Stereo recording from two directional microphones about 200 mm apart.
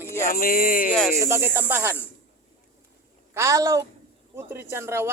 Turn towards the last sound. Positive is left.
turn(degrees=-10)  # may be behind; listen again after turning